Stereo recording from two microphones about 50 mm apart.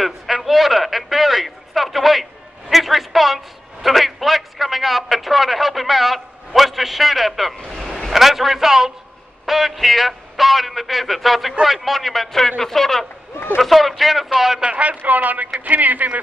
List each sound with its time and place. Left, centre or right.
0.0 s a man's voice: centre
14.6 s speech: centre
14.9 s speech: right